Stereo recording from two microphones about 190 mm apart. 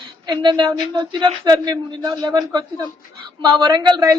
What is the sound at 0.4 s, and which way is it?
A woman's voice, 25° right (ahead or behind).